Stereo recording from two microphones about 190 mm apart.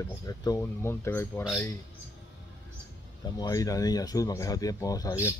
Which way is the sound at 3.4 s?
20° left (ahead or behind).